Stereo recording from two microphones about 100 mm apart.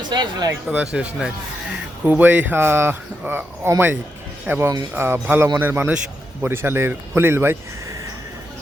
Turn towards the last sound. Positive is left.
turn(degrees=-25)  # may be behind; listen again after turning